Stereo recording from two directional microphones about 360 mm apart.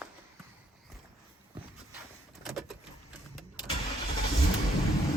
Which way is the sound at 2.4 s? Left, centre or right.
Centre.